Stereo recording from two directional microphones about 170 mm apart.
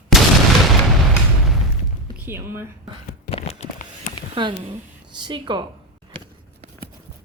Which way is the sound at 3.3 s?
40° left (ahead or behind).